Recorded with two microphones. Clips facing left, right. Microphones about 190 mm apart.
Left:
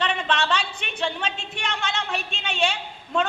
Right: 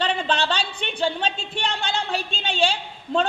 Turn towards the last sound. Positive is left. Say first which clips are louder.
# right 2 dB
turn(degrees=-30)  # may be behind; listen again after turning